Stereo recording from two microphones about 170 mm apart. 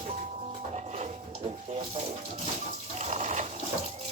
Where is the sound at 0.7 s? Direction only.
45° right (ahead or behind).